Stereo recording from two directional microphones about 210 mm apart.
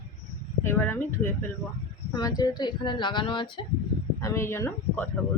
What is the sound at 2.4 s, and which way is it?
Speech, 20° left (ahead or behind).